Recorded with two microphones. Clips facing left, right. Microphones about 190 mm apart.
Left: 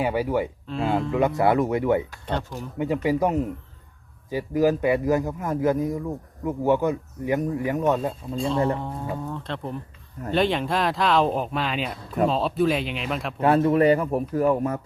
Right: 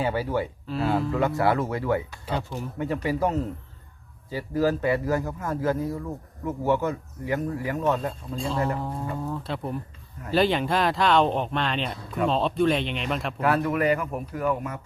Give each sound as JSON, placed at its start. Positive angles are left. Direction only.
{"t": 0.0, "sound": "speech", "side_deg": 15}
{"t": 0.7, "sound": "speech", "side_deg": 0}
{"t": 1.1, "sound": "speech", "side_deg": 20}
{"t": 8.8, "sound": "speech", "side_deg": 0}
{"t": 13.4, "sound": "speech", "side_deg": 30}